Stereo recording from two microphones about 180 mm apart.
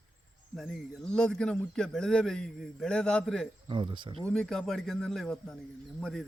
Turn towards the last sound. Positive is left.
turn(degrees=0)  # may be behind; listen again after turning